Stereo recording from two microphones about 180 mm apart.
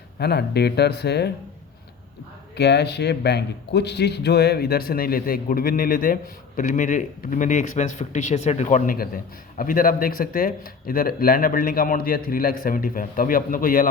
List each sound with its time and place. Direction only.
0.2 s speech: 65° left (ahead or behind)
2.6 s a man's voice: 70° left (ahead or behind); by 13.8 s 50° left (ahead or behind)